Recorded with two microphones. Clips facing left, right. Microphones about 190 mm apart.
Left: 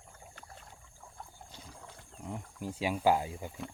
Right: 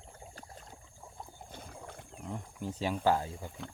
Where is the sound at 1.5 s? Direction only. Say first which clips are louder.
Right 5 dB; 55° right (ahead or behind).